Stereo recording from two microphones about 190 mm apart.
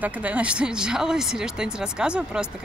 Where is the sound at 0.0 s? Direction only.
5° right (ahead or behind).